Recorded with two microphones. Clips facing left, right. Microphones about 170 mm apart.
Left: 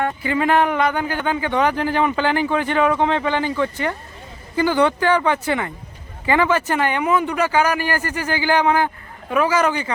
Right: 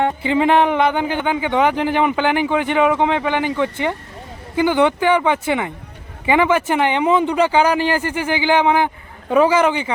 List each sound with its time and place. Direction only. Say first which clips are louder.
0.0 s speech: right 4 dB; 20° right (ahead or behind)